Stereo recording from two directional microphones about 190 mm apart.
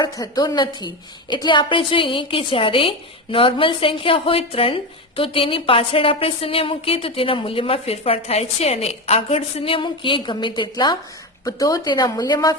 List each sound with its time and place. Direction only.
0.0 s a woman's voice: 20° left (ahead or behind)